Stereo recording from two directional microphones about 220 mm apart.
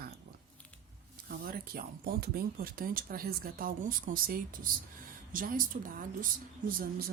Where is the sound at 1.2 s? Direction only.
40° right (ahead or behind).